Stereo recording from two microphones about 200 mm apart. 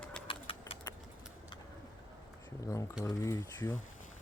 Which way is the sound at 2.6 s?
15° left (ahead or behind).